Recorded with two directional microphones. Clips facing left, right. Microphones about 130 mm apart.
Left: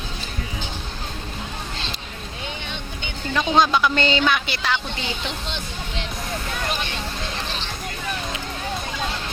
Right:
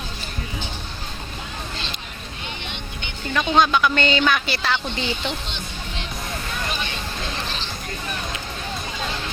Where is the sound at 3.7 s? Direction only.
30° left (ahead or behind).